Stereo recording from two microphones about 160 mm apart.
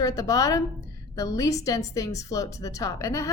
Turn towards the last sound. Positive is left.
turn(degrees=20)  # may be behind; listen again after turning